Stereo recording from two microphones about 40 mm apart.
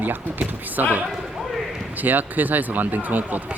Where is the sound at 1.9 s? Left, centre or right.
Right.